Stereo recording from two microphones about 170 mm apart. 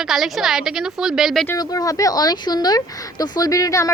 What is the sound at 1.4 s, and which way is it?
Speech, 20° left (ahead or behind).